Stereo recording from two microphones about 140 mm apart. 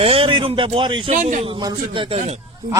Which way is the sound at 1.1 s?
65° right (ahead or behind).